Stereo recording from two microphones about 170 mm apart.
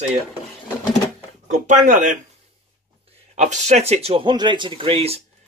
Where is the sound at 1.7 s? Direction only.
50° right (ahead or behind).